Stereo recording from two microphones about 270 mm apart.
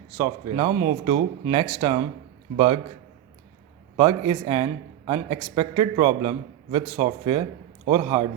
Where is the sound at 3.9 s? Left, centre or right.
Centre.